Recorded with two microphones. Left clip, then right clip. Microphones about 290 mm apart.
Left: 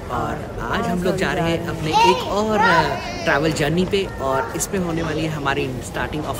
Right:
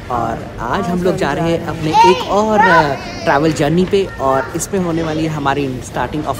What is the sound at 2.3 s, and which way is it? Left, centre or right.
Speech, centre.